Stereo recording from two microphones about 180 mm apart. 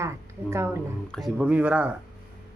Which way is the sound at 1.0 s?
Centre (ahead or behind).